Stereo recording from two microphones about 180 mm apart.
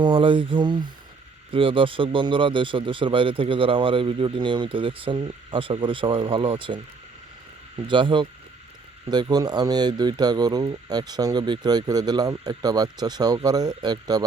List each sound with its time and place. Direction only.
0.0 s speech: 25° right (ahead or behind)
7.9 s speech: 25° right (ahead or behind)